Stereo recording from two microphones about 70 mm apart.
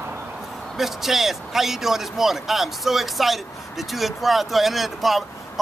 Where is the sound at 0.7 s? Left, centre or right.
Centre.